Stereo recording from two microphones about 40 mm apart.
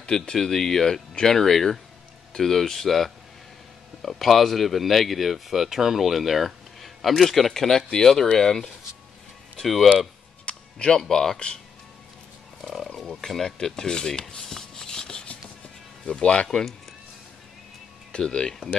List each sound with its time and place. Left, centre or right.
0.1 s speech: centre
10.4 s a sound: left
11.0 s speech: centre
11.3 s speech: left
12.6 s speech: centre
13.6 s rub: centre
16.1 s speech: left
16.4 s speech: centre
18.1 s speech: centre